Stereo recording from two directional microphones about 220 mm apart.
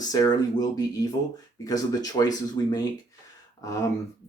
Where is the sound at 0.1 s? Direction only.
15° left (ahead or behind).